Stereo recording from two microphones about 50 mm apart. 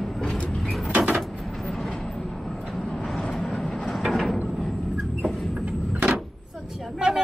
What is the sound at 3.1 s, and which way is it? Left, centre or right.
Vehicle, centre.